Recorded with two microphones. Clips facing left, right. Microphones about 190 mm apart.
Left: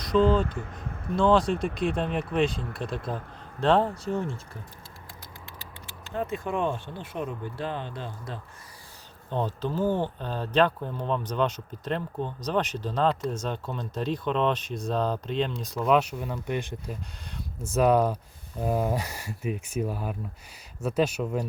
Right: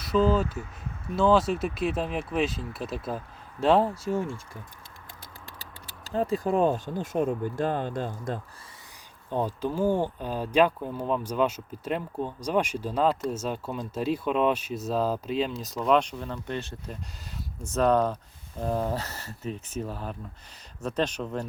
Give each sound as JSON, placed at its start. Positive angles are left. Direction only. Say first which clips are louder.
{"t": 0.0, "sound": "speech", "louder": "left 1 dB", "side_deg": -5}
{"t": 0.6, "sound": "a sound", "louder": "left 2 dB", "side_deg": 55}
{"t": 1.1, "sound": "speech", "louder": "even", "side_deg": -5}
{"t": 5.5, "sound": "speech", "louder": "left 1 dB", "side_deg": -35}
{"t": 9.3, "sound": "speech", "louder": "right 1 dB", "side_deg": -10}